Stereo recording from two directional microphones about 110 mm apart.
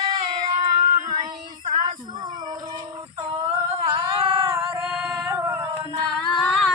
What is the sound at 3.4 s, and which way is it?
Humming, 65° right (ahead or behind).